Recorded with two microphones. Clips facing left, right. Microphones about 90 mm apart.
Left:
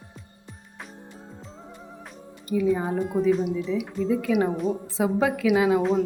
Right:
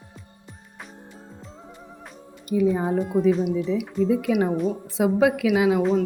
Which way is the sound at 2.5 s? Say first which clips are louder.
Right 2 dB; 15° right (ahead or behind).